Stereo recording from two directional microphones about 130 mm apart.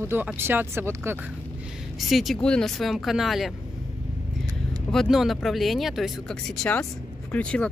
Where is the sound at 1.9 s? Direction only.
Centre (ahead or behind).